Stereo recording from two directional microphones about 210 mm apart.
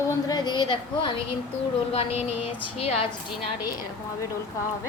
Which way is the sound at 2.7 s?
30° left (ahead or behind).